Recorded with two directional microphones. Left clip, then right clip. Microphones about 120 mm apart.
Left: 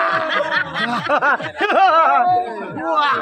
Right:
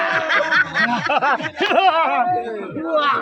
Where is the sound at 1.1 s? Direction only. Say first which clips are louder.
Left 1 dB; 25° left (ahead or behind).